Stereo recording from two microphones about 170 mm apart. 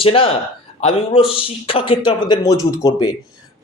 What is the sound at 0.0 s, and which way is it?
Speech, 35° left (ahead or behind).